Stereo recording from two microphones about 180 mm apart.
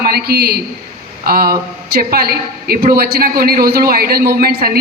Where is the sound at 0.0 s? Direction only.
60° right (ahead or behind).